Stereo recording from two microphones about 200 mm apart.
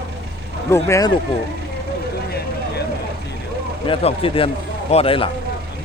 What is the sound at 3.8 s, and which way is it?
Speech, 25° left (ahead or behind).